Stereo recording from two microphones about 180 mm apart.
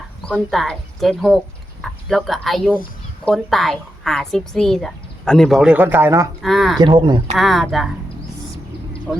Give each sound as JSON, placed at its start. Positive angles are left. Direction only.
{"t": 0.3, "sound": "a woman's voice", "side_deg": 0}
{"t": 6.4, "sound": "a woman's voice", "side_deg": 0}
{"t": 6.7, "sound": "speech", "side_deg": -25}
{"t": 7.3, "sound": "a woman's voice", "side_deg": 0}
{"t": 9.1, "sound": "speech", "side_deg": -10}